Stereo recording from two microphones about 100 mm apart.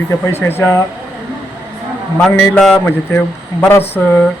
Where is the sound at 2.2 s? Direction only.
5° left (ahead or behind).